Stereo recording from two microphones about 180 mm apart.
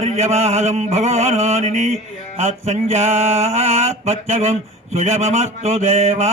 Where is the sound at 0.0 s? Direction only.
40° right (ahead or behind).